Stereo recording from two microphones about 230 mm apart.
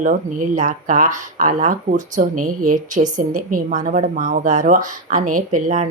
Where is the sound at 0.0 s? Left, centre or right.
Right.